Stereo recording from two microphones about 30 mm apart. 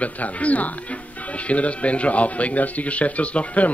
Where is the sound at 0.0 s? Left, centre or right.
Left.